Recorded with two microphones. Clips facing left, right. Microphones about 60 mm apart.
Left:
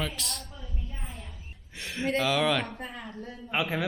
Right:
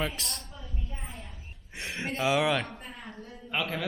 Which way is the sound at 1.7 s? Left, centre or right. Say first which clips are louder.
Left 5 dB; right.